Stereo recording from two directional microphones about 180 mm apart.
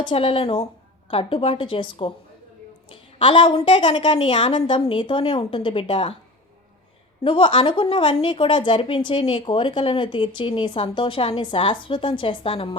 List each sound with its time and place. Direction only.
0.0 s a woman's voice: 30° left (ahead or behind)
7.3 s a woman's voice: 30° left (ahead or behind)